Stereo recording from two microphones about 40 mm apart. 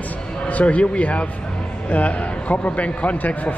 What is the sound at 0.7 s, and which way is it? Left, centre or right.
Speech, left.